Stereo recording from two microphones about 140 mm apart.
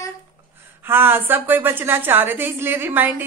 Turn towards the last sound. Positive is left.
turn(degrees=-15)  # may be behind; listen again after turning